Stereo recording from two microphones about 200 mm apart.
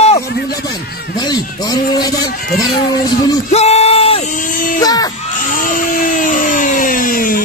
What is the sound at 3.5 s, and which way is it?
Yell, 30° left (ahead or behind).